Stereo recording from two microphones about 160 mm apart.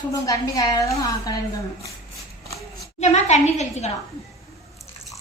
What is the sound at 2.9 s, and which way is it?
Speech, 45° left (ahead or behind).